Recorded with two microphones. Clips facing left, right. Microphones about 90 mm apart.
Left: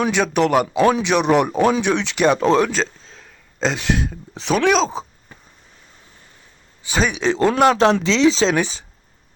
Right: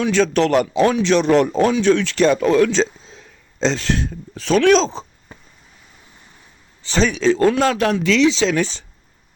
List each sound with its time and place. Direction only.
0.0 s a man's voice: 15° left (ahead or behind)
2.7 s a sound: 5° right (ahead or behind)
3.8 s a man's voice: 10° left (ahead or behind)
6.8 s a man's voice: 10° left (ahead or behind); by 8.5 s 35° left (ahead or behind)
8.5 s a man's voice: 15° left (ahead or behind)